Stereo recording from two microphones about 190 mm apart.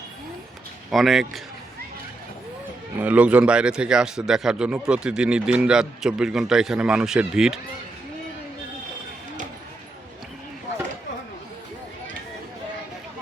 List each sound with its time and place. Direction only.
0.9 s a man's voice: centre (ahead or behind)
3.0 s a man's voice: 10° right (ahead or behind)